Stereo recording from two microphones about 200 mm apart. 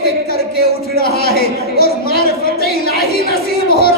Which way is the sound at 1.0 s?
50° left (ahead or behind).